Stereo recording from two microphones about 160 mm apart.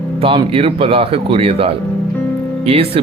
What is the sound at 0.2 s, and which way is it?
Speech, 35° right (ahead or behind).